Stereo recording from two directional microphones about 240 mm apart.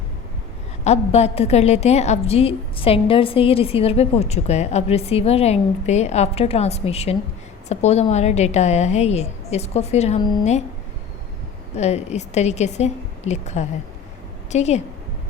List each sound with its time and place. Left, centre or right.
0.9 s a woman's voice: left
11.7 s a woman's voice: left